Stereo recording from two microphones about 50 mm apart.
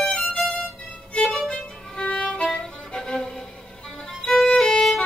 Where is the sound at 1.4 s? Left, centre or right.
Left; by 5.0 s centre.